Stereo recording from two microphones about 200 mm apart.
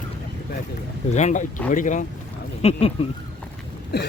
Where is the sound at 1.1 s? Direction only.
35° left (ahead or behind).